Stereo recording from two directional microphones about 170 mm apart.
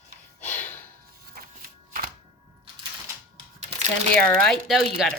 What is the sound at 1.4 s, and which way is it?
Shuffling cards, 60° right (ahead or behind).